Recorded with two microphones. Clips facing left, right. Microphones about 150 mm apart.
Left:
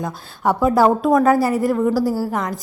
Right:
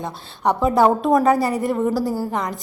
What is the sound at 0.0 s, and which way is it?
Speech, centre (ahead or behind).